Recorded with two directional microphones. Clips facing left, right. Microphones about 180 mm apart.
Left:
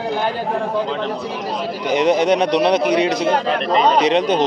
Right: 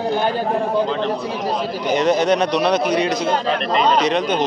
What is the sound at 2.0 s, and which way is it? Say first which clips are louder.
Speech: left 2 dB; 15° left (ahead or behind).